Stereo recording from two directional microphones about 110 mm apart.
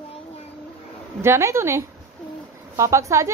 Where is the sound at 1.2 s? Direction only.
25° right (ahead or behind).